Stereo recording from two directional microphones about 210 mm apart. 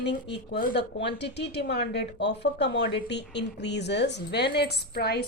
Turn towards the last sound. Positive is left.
turn(degrees=50)  # may be behind; listen again after turning